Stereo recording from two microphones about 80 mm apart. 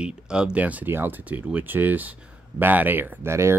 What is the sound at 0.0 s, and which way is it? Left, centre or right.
Speech, centre.